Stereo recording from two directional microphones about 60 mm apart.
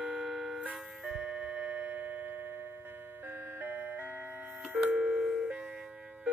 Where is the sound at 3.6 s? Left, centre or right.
Right.